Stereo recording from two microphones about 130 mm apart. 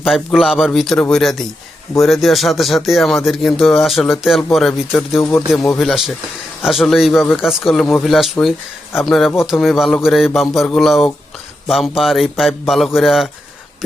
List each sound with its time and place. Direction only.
0.0 s speech: centre (ahead or behind)
7.1 s speech: 15° left (ahead or behind)
7.4 s speech: centre (ahead or behind)